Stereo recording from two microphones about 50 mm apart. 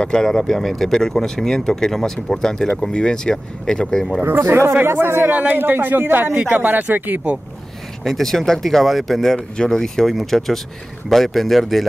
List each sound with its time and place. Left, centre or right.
0.0 s speech: centre
4.2 s speech: right
5.3 s speech: right
8.0 s speech: centre